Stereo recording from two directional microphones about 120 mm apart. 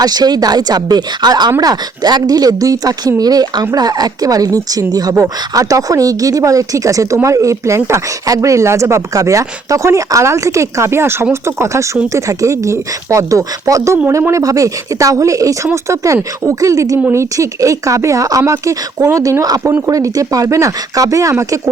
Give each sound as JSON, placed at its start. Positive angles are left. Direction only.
{"t": 0.0, "sound": "speech", "side_deg": -35}